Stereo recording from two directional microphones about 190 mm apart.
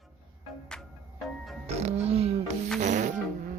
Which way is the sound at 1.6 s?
35° right (ahead or behind).